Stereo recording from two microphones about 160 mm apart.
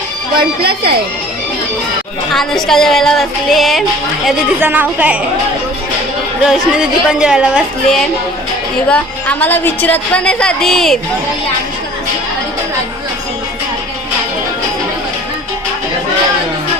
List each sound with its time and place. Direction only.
0.3 s speech: 75° right (ahead or behind)
2.3 s a woman's voice: centre (ahead or behind)
4.6 s speech: 10° right (ahead or behind)
6.4 s a woman's voice: 5° right (ahead or behind)
8.9 s a woman's voice: 10° left (ahead or behind)